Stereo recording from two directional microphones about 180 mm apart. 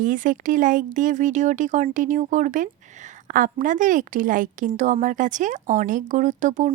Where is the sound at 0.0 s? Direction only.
45° right (ahead or behind).